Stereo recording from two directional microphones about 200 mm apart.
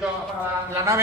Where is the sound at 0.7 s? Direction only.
15° right (ahead or behind).